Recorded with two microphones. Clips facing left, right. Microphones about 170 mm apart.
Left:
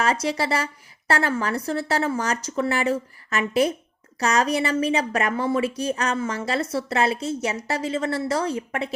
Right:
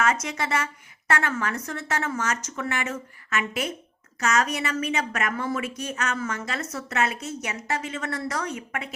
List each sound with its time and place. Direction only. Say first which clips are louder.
0.0 s a woman's voice: left 3 dB; 35° left (ahead or behind)